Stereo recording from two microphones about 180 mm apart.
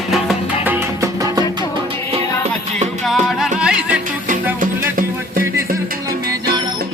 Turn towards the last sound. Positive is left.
turn(degrees=-50)  # may be behind; listen again after turning